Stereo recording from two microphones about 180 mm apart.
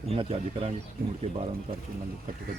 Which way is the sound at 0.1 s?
35° right (ahead or behind).